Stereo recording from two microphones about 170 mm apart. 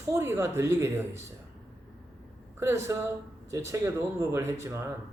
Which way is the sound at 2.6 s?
15° right (ahead or behind).